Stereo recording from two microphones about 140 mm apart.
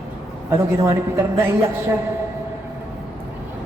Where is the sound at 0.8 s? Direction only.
20° right (ahead or behind).